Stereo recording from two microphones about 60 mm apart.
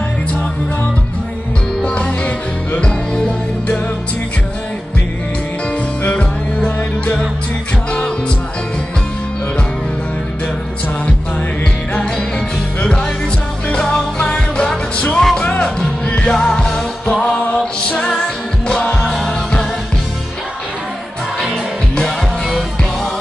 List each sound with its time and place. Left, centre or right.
1.8 s music: left
12.8 s music: centre